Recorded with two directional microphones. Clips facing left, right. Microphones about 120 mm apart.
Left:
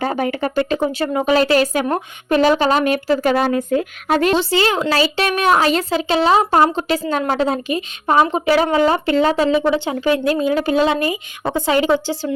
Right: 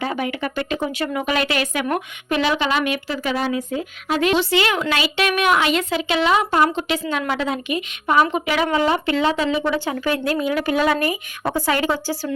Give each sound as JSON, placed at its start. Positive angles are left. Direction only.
{"t": 0.0, "sound": "a woman's voice", "side_deg": 40}
{"t": 4.3, "sound": "a woman's voice", "side_deg": 35}